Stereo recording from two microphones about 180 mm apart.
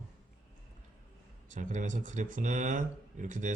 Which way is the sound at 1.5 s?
45° right (ahead or behind).